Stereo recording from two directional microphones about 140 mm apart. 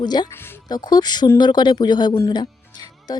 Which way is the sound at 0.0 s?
30° left (ahead or behind).